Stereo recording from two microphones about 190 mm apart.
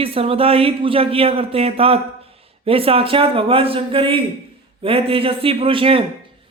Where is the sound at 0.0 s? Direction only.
30° right (ahead or behind).